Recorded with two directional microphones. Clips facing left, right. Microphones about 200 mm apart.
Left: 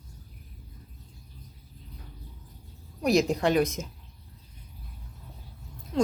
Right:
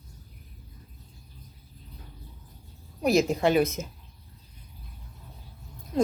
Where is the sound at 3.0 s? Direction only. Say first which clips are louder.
Right 1 dB; centre (ahead or behind).